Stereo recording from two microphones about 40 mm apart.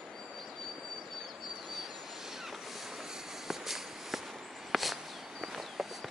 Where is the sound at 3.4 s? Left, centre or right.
Centre.